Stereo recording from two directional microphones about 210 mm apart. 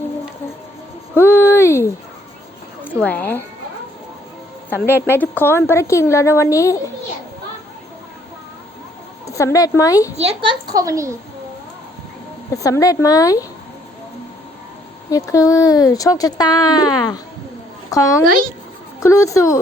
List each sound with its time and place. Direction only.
1.1 s a sound: 10° left (ahead or behind)
2.8 s a woman's voice: 10° left (ahead or behind)
4.7 s speech: 10° left (ahead or behind)
9.2 s speech: 15° left (ahead or behind)
10.2 s a woman's voice: 25° right (ahead or behind)
10.8 s a woman's voice: 15° right (ahead or behind)
12.6 s speech: 15° left (ahead or behind)
15.1 s speech: 15° left (ahead or behind)